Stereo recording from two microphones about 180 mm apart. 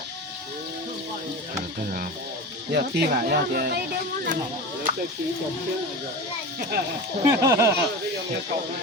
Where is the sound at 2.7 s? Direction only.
60° right (ahead or behind).